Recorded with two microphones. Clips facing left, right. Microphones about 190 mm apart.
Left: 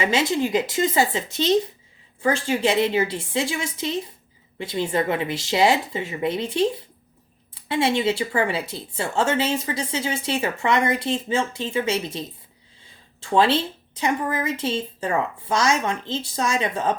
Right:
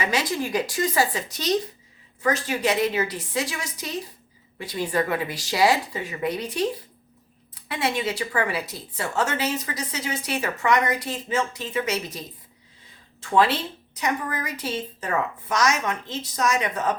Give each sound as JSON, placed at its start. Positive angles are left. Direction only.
{"t": 0.0, "sound": "a woman's voice", "side_deg": 25}